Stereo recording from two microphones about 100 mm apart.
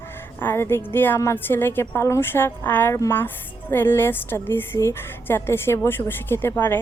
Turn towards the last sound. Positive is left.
turn(degrees=20)  # may be behind; listen again after turning